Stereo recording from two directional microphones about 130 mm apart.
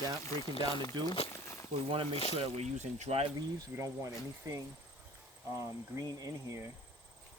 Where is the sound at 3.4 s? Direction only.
25° right (ahead or behind).